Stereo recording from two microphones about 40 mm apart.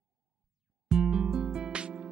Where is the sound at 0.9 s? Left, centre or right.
Centre.